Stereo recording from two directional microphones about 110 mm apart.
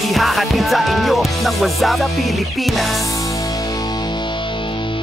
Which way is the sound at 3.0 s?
30° left (ahead or behind).